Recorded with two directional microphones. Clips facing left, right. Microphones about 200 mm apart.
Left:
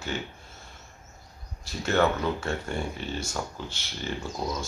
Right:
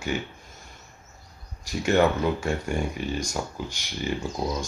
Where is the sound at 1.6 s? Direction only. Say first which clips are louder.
Right 3 dB; 15° right (ahead or behind).